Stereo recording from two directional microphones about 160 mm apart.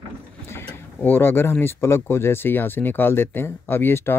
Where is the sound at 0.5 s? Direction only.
15° left (ahead or behind).